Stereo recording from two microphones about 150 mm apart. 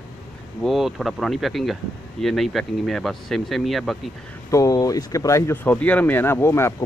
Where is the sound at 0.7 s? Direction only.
Centre (ahead or behind).